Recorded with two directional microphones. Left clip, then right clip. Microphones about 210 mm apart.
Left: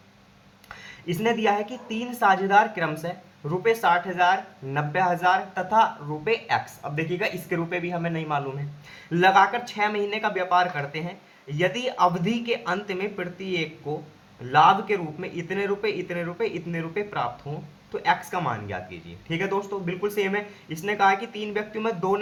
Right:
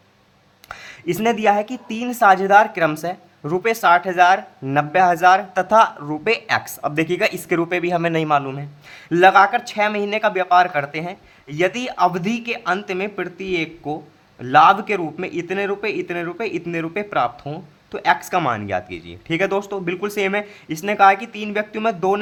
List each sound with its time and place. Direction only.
0.7 s a woman's voice: 45° right (ahead or behind)